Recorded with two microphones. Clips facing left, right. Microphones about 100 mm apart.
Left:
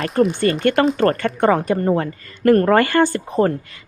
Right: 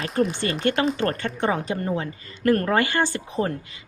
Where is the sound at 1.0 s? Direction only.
50° left (ahead or behind).